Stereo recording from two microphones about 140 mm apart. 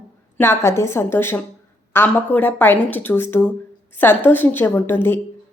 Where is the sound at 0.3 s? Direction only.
20° left (ahead or behind).